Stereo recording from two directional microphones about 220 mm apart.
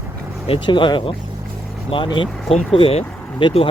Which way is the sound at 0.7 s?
20° left (ahead or behind).